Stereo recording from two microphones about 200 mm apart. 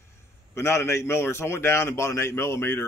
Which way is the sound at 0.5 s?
15° left (ahead or behind).